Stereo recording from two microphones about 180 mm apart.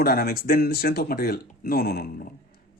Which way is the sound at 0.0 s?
60° left (ahead or behind).